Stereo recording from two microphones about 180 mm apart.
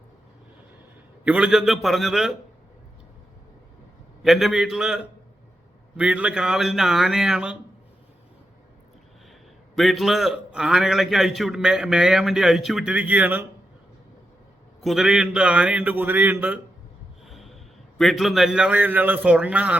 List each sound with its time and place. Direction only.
1.2 s a man's voice: 5° right (ahead or behind)
4.2 s a man's voice: centre (ahead or behind)
6.0 s a man's voice: 5° right (ahead or behind)
9.7 s a man's voice: centre (ahead or behind)
14.8 s a man's voice: centre (ahead or behind)